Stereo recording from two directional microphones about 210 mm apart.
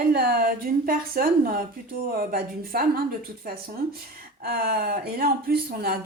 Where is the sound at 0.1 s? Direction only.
45° right (ahead or behind).